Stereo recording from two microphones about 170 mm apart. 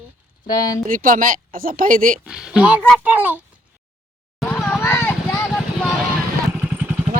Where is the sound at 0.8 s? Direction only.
55° right (ahead or behind).